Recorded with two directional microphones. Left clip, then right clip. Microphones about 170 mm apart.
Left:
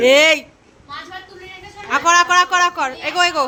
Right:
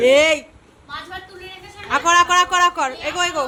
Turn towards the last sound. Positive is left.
turn(degrees=10)  # may be behind; listen again after turning